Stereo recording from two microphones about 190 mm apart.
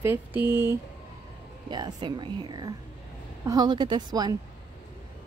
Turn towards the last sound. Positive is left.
turn(degrees=-20)  # may be behind; listen again after turning